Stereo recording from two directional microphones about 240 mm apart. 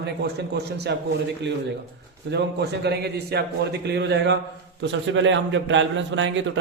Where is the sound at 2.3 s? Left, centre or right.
Right.